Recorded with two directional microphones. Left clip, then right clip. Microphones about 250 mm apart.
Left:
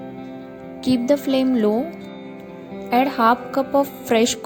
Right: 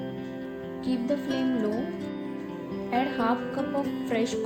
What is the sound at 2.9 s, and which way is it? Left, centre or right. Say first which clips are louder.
A woman's voice: left 10 dB; left.